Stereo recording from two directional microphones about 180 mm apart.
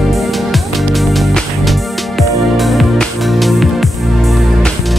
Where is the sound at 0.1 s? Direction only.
Centre (ahead or behind).